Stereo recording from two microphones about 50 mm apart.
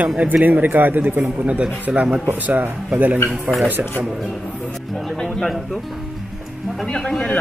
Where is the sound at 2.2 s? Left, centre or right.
Right.